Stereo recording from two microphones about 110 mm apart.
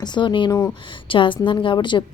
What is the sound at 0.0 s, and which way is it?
A woman's voice, 40° left (ahead or behind).